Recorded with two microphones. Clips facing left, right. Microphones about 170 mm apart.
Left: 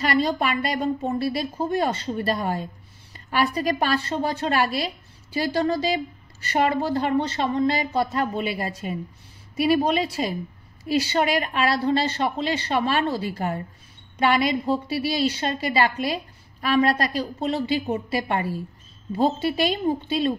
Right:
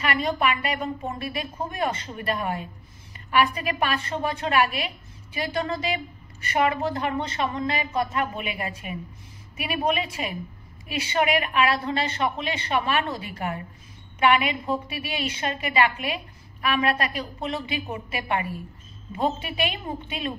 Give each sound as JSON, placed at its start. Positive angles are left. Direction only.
{"t": 0.0, "sound": "a woman's voice", "side_deg": 35}